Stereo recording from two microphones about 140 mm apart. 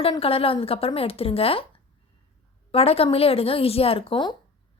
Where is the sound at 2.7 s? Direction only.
45° left (ahead or behind).